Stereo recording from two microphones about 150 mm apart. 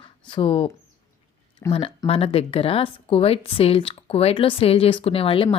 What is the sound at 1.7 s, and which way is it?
Speech, 40° left (ahead or behind).